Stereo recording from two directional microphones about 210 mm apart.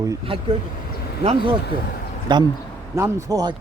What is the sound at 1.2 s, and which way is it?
Speech, 25° right (ahead or behind).